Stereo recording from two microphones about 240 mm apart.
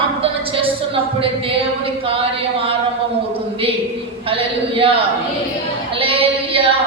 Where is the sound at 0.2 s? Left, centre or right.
Right.